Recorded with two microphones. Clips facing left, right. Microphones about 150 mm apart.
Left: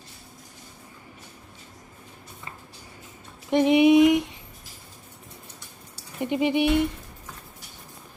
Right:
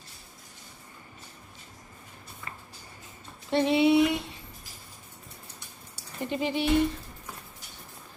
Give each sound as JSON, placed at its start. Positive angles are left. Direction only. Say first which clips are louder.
{"t": 3.5, "sound": "speech", "louder": "left 5 dB", "side_deg": 15}
{"t": 6.1, "sound": "speech", "louder": "left 6 dB", "side_deg": 15}